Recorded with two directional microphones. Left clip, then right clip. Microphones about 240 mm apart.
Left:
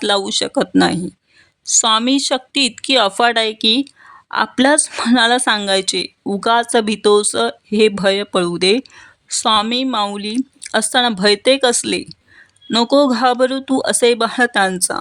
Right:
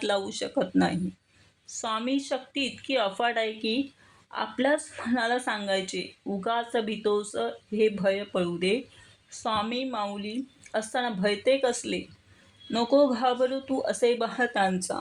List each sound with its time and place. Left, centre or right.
0.0 s speech: left